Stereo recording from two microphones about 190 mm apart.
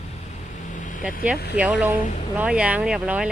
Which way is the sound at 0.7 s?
40° left (ahead or behind).